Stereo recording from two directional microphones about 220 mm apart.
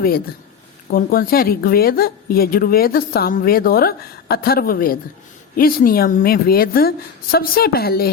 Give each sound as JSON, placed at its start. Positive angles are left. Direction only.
{"t": 0.9, "sound": "a woman's voice", "side_deg": 40}